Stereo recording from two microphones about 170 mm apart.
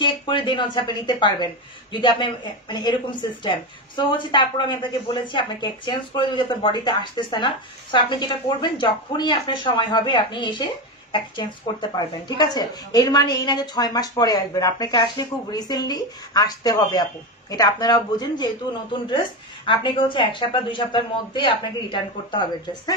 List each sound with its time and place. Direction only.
0.0 s a woman's voice: 30° left (ahead or behind)